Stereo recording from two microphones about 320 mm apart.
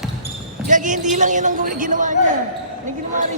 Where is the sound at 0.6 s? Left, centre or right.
Right.